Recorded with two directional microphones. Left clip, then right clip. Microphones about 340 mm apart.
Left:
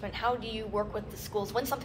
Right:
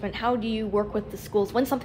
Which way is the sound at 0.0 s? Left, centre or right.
Right.